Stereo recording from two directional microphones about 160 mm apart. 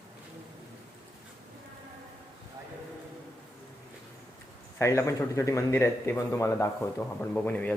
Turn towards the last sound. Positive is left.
turn(degrees=10)  # may be behind; listen again after turning